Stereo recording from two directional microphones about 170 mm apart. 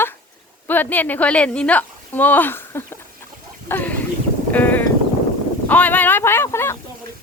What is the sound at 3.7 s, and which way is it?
Chicken, 10° left (ahead or behind).